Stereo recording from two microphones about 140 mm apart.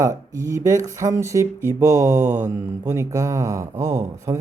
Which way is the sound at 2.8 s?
20° right (ahead or behind).